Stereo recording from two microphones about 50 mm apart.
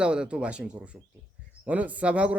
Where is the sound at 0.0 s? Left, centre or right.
Centre.